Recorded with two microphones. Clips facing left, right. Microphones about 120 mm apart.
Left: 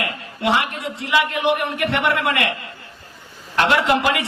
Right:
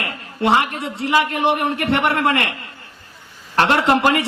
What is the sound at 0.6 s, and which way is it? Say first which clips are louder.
A man's voice: right 3 dB; 35° right (ahead or behind).